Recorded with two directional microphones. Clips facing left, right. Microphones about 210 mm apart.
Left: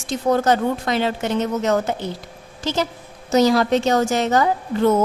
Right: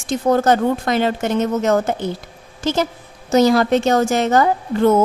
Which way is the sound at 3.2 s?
55° right (ahead or behind).